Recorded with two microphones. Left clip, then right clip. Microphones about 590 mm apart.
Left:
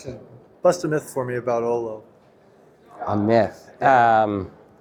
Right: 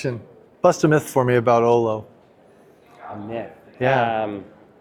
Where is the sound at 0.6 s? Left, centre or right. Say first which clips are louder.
Right 3 dB; right.